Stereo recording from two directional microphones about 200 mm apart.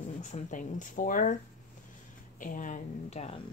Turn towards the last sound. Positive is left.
turn(degrees=35)  # may be behind; listen again after turning